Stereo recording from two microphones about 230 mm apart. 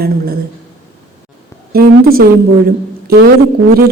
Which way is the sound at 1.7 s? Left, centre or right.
Right.